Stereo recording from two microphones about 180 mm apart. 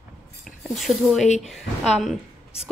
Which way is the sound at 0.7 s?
Centre (ahead or behind).